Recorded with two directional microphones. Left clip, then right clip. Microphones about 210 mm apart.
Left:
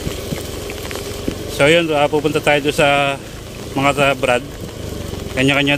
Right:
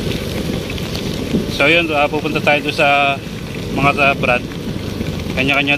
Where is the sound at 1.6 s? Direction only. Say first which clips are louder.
Even; 30° left (ahead or behind).